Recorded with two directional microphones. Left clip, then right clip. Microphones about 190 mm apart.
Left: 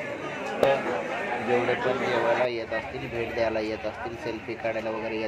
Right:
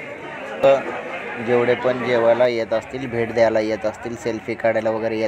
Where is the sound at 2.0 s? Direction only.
25° right (ahead or behind).